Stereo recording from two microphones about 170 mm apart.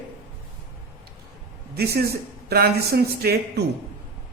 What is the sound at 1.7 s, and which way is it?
A man's voice, 65° right (ahead or behind).